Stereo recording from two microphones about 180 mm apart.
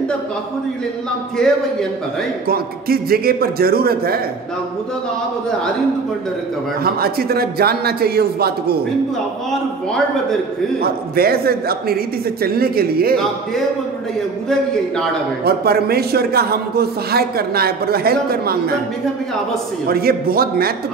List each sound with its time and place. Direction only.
1.4 s a man's voice: 5° left (ahead or behind)
2.4 s a man's voice: 55° right (ahead or behind)
6.8 s a man's voice: 60° right (ahead or behind)
10.8 s a man's voice: 60° right (ahead or behind)
15.4 s a man's voice: 60° right (ahead or behind)
19.9 s a man's voice: 55° right (ahead or behind)